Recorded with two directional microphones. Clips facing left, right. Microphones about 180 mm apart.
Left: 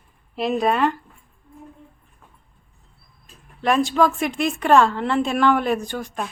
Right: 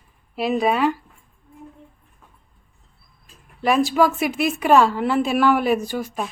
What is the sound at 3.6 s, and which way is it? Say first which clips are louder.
Speech: right 1 dB; 5° right (ahead or behind).